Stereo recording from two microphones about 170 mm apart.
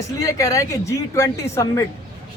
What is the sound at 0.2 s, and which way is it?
A man's voice, 20° left (ahead or behind).